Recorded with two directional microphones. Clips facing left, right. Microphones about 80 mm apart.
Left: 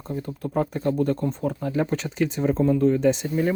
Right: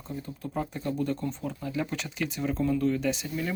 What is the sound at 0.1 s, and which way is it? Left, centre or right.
Speech, left.